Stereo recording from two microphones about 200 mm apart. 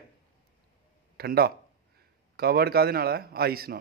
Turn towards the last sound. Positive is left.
turn(degrees=-50)  # may be behind; listen again after turning